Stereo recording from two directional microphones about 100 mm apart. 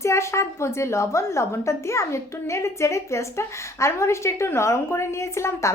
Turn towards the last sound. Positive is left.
turn(degrees=30)  # may be behind; listen again after turning